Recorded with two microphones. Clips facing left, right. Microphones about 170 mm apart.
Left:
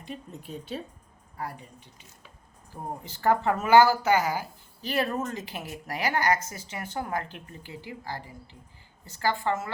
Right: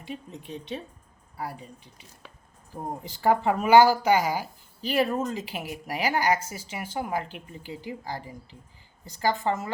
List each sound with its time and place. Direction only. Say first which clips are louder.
0.0 s speech: right 2 dB; centre (ahead or behind)
3.0 s a woman's voice: right 1 dB; 10° right (ahead or behind)